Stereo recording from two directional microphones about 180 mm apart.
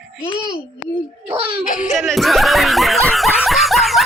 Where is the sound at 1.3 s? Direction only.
30° right (ahead or behind).